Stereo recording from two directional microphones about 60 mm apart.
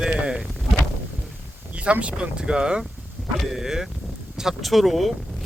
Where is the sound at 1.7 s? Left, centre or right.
Right.